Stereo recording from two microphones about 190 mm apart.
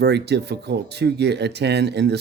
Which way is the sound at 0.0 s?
60° right (ahead or behind).